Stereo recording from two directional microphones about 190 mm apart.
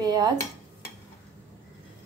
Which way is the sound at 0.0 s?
20° right (ahead or behind).